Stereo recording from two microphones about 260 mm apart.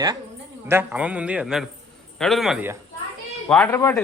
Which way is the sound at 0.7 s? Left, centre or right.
Centre.